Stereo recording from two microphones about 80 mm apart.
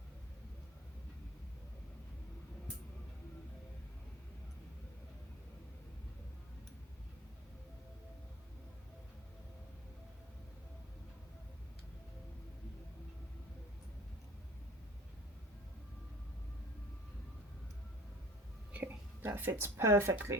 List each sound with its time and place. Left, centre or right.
18.7 s speech: right